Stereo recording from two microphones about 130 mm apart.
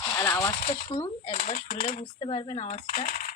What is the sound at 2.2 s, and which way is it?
Speech, 40° left (ahead or behind).